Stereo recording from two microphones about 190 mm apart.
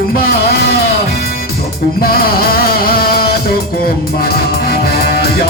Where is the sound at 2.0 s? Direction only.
55° left (ahead or behind).